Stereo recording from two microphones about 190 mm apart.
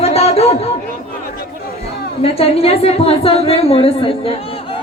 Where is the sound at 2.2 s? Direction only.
30° left (ahead or behind).